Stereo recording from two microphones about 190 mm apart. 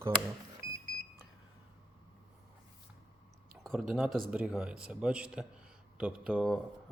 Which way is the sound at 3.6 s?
Centre (ahead or behind).